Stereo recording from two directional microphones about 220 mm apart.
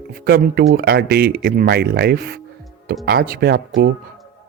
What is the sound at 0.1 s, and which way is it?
Speech, 45° right (ahead or behind).